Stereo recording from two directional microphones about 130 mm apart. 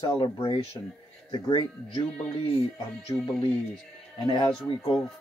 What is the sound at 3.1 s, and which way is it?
Speech, 25° left (ahead or behind).